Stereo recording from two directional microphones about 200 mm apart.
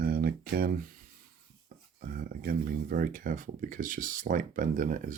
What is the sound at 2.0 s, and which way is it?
Speech, 45° right (ahead or behind).